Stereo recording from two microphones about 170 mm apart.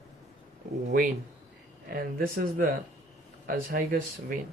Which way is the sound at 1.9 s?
60° right (ahead or behind).